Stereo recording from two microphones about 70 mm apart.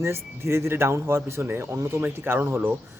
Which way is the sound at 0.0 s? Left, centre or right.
Right.